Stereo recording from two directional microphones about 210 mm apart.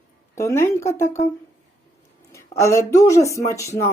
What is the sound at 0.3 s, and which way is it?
Speech, 15° left (ahead or behind).